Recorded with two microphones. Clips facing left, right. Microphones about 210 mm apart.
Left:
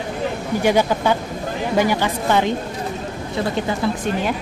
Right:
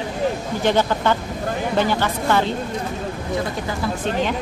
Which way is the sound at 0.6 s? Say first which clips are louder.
Left 1 dB; 10° left (ahead or behind).